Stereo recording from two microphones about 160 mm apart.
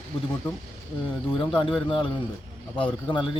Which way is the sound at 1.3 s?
35° left (ahead or behind).